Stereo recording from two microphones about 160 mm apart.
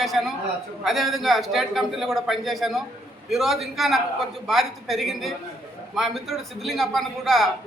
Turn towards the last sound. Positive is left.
turn(degrees=0)  # may be behind; listen again after turning